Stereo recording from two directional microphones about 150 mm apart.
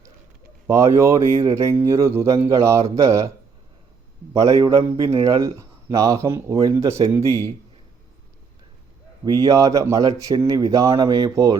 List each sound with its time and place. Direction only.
0.7 s speech: 20° right (ahead or behind)
4.9 s speech: 20° right (ahead or behind)
9.2 s speech: 25° right (ahead or behind)